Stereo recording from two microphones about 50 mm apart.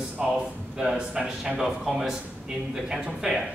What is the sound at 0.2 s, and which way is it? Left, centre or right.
A man's voice, centre.